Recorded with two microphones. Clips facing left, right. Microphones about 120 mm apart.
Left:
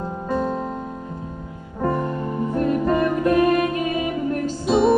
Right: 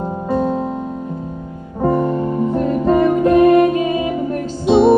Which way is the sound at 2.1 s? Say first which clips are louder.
Right 6 dB; 20° right (ahead or behind).